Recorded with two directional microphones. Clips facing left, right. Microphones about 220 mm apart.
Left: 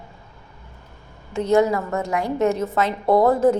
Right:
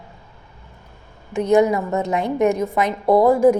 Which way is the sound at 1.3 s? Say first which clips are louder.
Right 2 dB; 15° right (ahead or behind).